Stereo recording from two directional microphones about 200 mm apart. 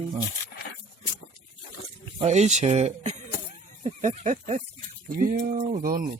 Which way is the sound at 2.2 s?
35° right (ahead or behind).